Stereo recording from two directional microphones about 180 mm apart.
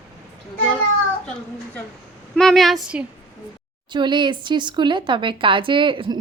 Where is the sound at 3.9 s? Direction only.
25° right (ahead or behind).